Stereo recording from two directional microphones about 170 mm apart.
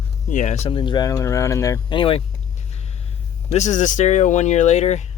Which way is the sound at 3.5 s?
45° left (ahead or behind).